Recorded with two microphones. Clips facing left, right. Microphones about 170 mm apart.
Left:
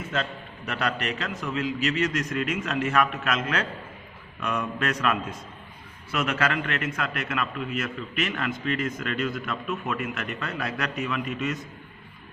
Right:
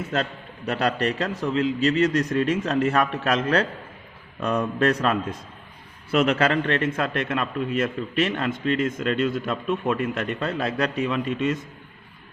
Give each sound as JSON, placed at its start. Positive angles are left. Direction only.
{"t": 0.1, "sound": "a man's voice", "side_deg": -35}